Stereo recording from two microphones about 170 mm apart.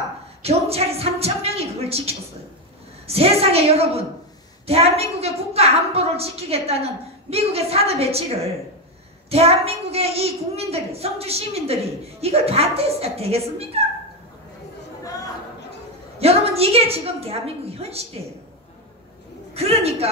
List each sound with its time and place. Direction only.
0.4 s a sound: 35° right (ahead or behind)
3.1 s a woman's voice: 35° right (ahead or behind)
9.3 s a woman's voice: 35° right (ahead or behind)
16.2 s a woman's voice: 35° right (ahead or behind)
19.5 s a woman's voice: 35° right (ahead or behind)